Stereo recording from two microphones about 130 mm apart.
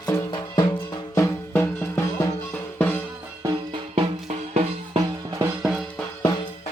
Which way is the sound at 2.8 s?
15° left (ahead or behind).